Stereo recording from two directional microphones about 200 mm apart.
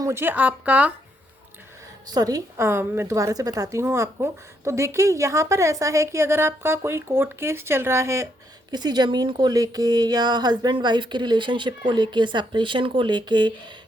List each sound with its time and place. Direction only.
0.0 s a woman's voice: 10° right (ahead or behind)
2.1 s a woman's voice: 20° right (ahead or behind)